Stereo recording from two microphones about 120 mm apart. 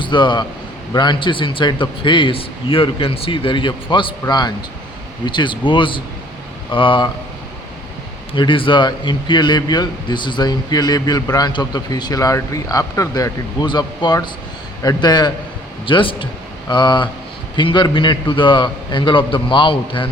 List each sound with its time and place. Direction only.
0.0 s a man's voice: 40° left (ahead or behind)
8.3 s a man's voice: 45° left (ahead or behind)